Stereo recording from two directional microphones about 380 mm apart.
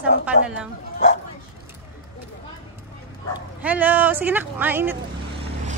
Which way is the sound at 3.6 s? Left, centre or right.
Centre.